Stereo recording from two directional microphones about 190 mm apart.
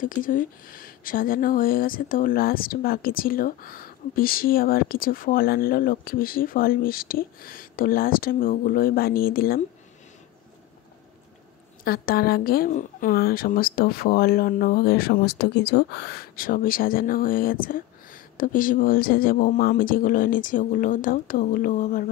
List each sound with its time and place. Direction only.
0.0 s a woman's voice: 45° left (ahead or behind)
11.8 s a woman's voice: 50° left (ahead or behind)